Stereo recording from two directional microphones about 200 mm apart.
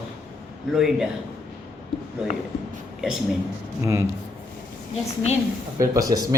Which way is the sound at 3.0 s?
5° right (ahead or behind).